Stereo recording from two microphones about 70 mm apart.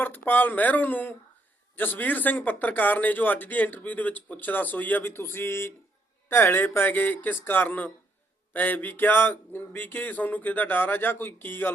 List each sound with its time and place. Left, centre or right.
0.0 s speech: left